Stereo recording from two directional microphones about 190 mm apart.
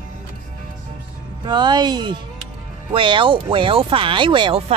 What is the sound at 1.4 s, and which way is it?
Speech, 25° right (ahead or behind).